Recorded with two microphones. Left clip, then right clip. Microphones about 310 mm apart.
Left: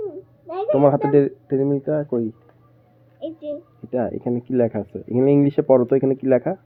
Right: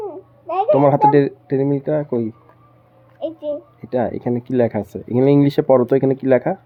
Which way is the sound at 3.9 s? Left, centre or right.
Right.